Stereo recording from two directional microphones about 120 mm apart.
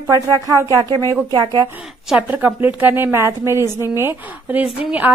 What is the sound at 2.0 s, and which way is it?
A woman's voice, 10° right (ahead or behind).